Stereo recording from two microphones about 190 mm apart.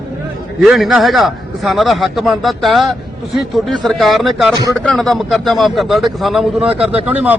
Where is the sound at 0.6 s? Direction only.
Centre (ahead or behind).